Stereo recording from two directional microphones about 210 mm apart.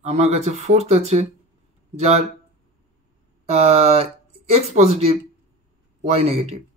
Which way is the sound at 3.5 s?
30° right (ahead or behind).